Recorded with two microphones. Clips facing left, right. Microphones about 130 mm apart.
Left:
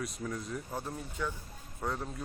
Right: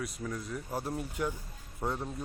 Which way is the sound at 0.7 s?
10° right (ahead or behind).